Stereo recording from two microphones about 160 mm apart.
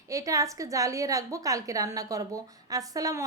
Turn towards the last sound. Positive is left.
turn(degrees=-20)  # may be behind; listen again after turning